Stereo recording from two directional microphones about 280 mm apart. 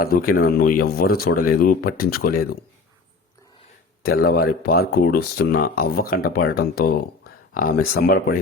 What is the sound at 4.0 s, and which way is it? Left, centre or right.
A man's voice, left.